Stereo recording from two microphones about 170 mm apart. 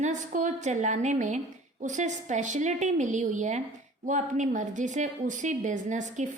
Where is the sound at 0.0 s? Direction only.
45° right (ahead or behind).